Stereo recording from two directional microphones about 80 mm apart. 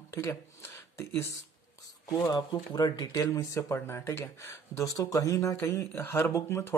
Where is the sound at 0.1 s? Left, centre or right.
Left.